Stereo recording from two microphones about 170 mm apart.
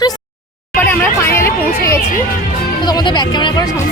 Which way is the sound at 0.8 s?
10° left (ahead or behind).